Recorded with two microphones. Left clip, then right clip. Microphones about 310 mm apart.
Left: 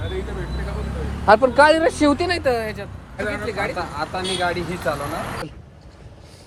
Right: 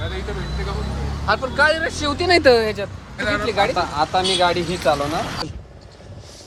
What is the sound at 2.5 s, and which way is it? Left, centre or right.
Speech, centre.